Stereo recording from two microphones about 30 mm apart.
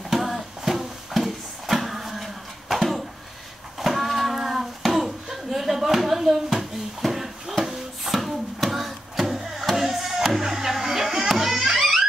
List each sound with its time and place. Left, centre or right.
0.1 s a sound: centre
4.4 s hands: centre
8.3 s music: centre